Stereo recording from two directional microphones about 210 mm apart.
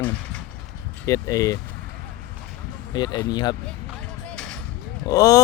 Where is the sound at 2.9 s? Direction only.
20° left (ahead or behind).